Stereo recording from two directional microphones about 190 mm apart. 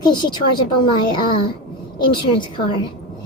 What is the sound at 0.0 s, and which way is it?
A woman's voice, 25° left (ahead or behind).